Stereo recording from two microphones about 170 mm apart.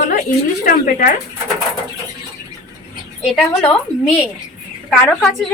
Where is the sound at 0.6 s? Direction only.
55° left (ahead or behind).